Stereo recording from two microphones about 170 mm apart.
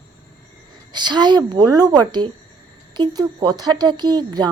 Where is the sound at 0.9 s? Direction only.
25° right (ahead or behind).